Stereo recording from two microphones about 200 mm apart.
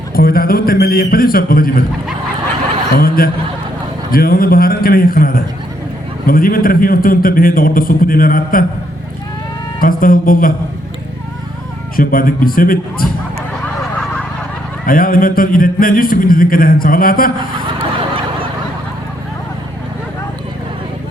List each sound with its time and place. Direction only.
0.1 s speech: 45° left (ahead or behind)
2.9 s speech: 45° left (ahead or behind)
9.8 s speech: 45° left (ahead or behind)
11.9 s speech: 45° left (ahead or behind)
14.8 s speech: 45° left (ahead or behind)